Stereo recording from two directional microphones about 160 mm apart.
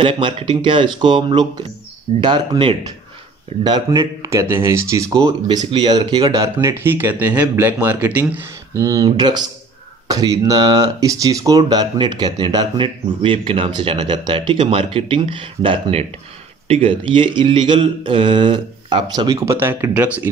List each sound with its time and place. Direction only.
0.0 s speech: 35° right (ahead or behind); by 20.2 s 10° right (ahead or behind)